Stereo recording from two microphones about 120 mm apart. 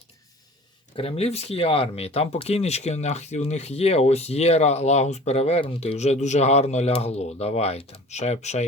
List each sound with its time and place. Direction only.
0.9 s speech: 55° left (ahead or behind)